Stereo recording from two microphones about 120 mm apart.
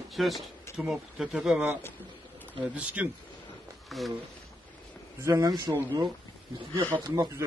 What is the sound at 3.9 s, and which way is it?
Speech, centre (ahead or behind).